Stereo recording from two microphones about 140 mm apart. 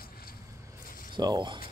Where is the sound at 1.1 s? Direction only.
30° right (ahead or behind).